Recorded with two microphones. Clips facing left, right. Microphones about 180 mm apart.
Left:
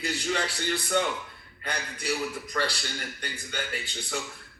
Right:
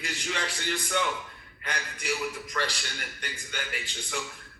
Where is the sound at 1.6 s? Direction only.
35° left (ahead or behind).